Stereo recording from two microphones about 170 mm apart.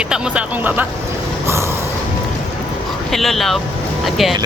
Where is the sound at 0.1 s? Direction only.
10° right (ahead or behind).